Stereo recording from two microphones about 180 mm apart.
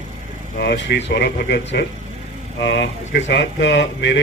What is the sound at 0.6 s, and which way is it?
A man's voice, 70° left (ahead or behind).